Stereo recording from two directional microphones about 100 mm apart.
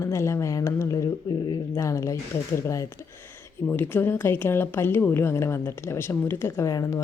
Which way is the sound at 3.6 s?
20° left (ahead or behind).